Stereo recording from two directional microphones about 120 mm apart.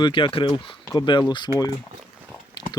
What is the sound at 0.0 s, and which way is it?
Speech, 45° left (ahead or behind).